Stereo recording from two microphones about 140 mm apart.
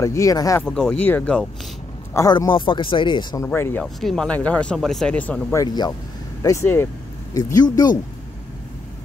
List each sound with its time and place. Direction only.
0.0 s speech: 20° left (ahead or behind)
0.7 s speech: 5° left (ahead or behind)
2.1 s speech: 25° left (ahead or behind)
2.5 s speech: 35° left (ahead or behind)
3.3 s speech: 20° left (ahead or behind)
3.8 s speech: 5° left (ahead or behind)
5.5 s speech: 25° left (ahead or behind)